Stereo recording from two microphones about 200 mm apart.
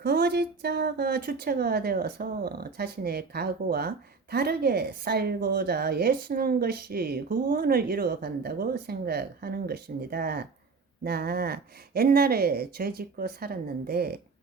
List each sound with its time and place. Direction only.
0.0 s speech: 50° right (ahead or behind)